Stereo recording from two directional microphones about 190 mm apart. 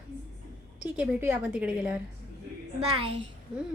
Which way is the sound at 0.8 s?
10° right (ahead or behind).